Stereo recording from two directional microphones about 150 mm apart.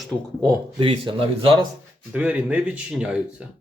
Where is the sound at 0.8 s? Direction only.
35° right (ahead or behind).